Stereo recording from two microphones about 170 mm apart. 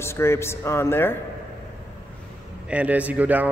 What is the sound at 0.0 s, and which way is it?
Speech, 15° left (ahead or behind).